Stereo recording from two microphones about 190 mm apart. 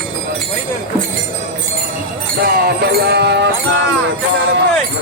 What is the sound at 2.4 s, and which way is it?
Music, 55° right (ahead or behind).